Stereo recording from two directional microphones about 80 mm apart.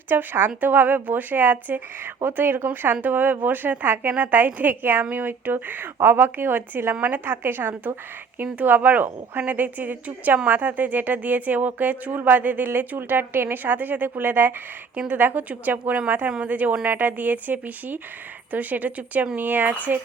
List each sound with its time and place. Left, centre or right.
0.1 s a woman's voice: right